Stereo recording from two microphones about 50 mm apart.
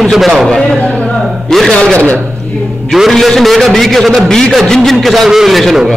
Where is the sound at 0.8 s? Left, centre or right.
Left.